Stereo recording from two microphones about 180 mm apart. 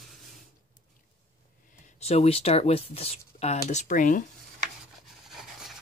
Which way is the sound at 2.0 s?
35° left (ahead or behind).